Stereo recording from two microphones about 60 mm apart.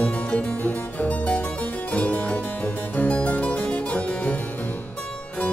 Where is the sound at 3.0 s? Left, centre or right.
Left.